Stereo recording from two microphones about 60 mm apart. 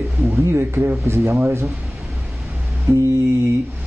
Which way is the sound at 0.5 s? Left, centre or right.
Right.